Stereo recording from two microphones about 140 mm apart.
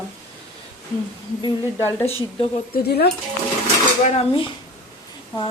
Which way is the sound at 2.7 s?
90° left.